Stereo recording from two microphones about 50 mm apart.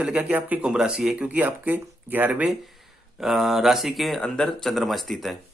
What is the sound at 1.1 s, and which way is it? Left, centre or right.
Speech, right.